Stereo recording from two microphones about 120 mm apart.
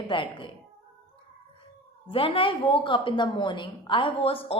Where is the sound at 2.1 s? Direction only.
50° left (ahead or behind).